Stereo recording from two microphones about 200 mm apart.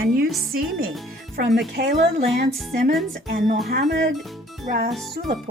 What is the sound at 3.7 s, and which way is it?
Speech, 50° right (ahead or behind).